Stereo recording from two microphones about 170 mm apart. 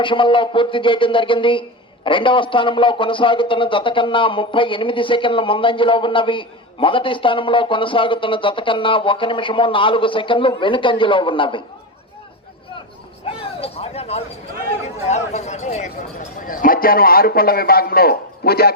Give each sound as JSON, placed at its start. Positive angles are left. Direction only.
{"t": 0.0, "sound": "a man's voice", "side_deg": 30}
{"t": 13.6, "sound": "a sound", "side_deg": 35}
{"t": 14.8, "sound": "chatter", "side_deg": 40}
{"t": 16.5, "sound": "a man's voice", "side_deg": 55}